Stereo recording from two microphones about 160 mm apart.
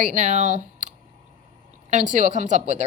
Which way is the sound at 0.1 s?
50° right (ahead or behind).